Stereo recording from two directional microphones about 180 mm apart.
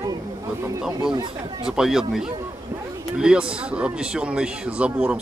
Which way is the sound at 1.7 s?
5° right (ahead or behind).